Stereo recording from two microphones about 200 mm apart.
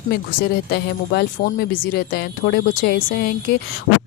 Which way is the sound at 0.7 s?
50° left (ahead or behind).